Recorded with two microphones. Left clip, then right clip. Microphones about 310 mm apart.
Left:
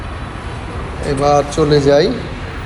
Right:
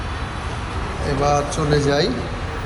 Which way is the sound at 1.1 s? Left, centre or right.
Centre.